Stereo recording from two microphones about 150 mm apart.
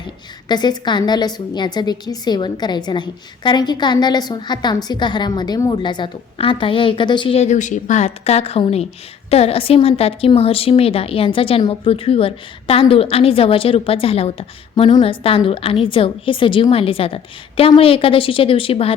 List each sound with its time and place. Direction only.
0.4 s a woman's voice: 30° left (ahead or behind)
7.3 s a woman's voice: 50° left (ahead or behind)